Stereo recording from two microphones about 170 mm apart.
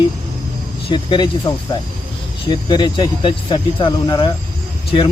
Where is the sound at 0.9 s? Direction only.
25° left (ahead or behind).